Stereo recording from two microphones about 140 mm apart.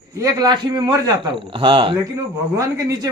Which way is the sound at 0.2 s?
30° right (ahead or behind).